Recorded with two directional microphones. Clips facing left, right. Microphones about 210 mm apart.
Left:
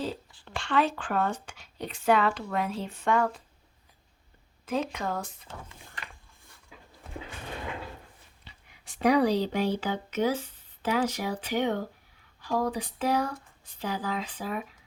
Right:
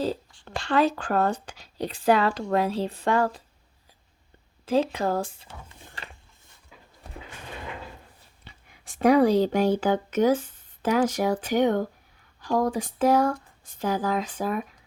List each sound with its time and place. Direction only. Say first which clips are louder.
0.4 s speech: right 4 dB; 35° right (ahead or behind)
4.6 s speech: right 7 dB; 30° right (ahead or behind)
8.4 s speech: right 5 dB; 45° right (ahead or behind)